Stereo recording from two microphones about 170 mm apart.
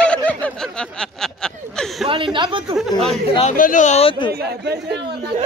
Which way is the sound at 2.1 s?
30° right (ahead or behind).